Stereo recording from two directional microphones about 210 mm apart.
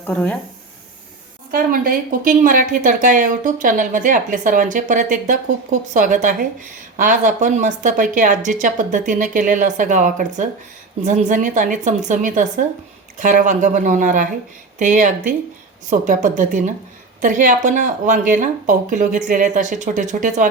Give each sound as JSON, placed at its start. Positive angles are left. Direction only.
{"t": 0.0, "sound": "speech", "side_deg": 5}
{"t": 1.5, "sound": "a woman's voice", "side_deg": -45}